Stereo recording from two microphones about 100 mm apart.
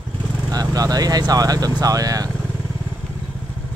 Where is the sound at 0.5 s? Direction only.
40° right (ahead or behind).